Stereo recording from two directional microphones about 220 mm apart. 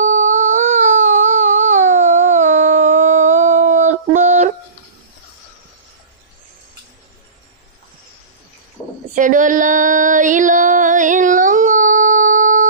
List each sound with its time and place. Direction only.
0.0 s baby cry: 35° right (ahead or behind)
8.8 s a sound: 15° left (ahead or behind)
9.1 s female singing: 35° right (ahead or behind)